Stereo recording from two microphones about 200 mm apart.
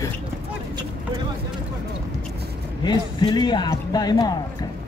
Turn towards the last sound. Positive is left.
turn(degrees=20)  # may be behind; listen again after turning